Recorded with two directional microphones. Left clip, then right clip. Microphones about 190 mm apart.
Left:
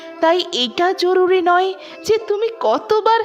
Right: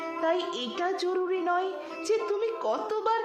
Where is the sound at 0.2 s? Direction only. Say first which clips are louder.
Left 13 dB; 50° left (ahead or behind).